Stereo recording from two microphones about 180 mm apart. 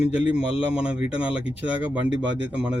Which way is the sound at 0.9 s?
30° left (ahead or behind).